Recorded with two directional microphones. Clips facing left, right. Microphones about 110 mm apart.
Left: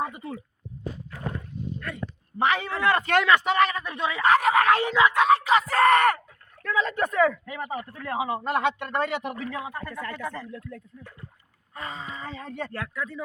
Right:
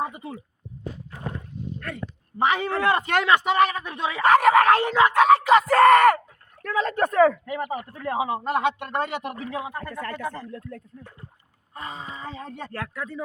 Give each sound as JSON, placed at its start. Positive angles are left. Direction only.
{"t": 0.0, "sound": "speech", "side_deg": -20}
{"t": 2.6, "sound": "speech", "side_deg": -45}
{"t": 2.8, "sound": "speech", "side_deg": -20}
{"t": 3.8, "sound": "speech", "side_deg": -25}
{"t": 4.2, "sound": "speech", "side_deg": -55}
{"t": 7.5, "sound": "speech", "side_deg": -15}
{"t": 9.7, "sound": "speech", "side_deg": -35}
{"t": 11.8, "sound": "speech", "side_deg": -20}
{"t": 12.7, "sound": "speech", "side_deg": -45}